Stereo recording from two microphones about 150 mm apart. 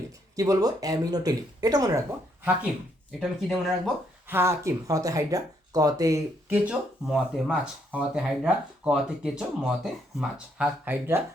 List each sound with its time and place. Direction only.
0.3 s speech: 25° right (ahead or behind)
3.1 s speech: centre (ahead or behind)
4.3 s speech: 15° right (ahead or behind)
6.5 s speech: 5° right (ahead or behind)